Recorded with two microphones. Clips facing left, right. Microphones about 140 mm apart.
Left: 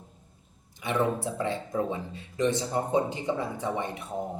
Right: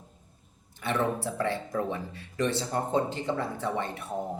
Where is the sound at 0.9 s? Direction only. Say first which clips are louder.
Left 1 dB; 15° left (ahead or behind).